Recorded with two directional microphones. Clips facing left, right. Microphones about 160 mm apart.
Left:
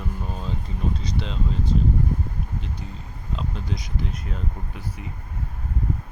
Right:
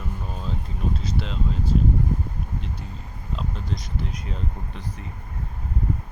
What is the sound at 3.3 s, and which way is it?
Speech, centre (ahead or behind).